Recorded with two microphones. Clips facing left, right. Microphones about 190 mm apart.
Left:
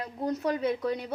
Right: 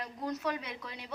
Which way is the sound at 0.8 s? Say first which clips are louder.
Left 16 dB; 50° left (ahead or behind).